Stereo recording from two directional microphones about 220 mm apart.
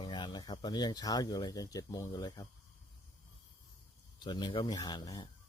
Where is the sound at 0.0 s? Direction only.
20° left (ahead or behind).